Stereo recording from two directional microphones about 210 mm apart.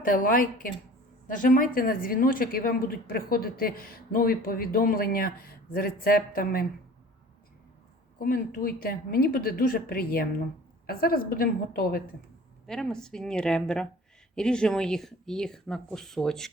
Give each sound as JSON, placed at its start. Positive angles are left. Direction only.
{"t": 0.0, "sound": "a woman's voice", "side_deg": 40}
{"t": 8.2, "sound": "a woman's voice", "side_deg": 40}
{"t": 12.6, "sound": "speech", "side_deg": 5}